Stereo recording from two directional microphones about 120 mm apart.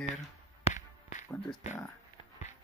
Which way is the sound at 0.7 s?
90° left.